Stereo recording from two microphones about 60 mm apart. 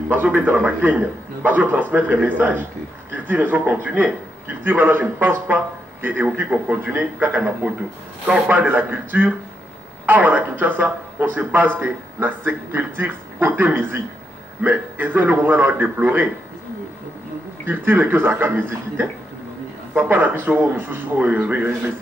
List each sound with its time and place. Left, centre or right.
0.1 s a man's voice: right
17.6 s a man's voice: right